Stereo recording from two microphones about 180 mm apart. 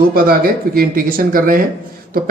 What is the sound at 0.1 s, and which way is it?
Speech, 55° right (ahead or behind).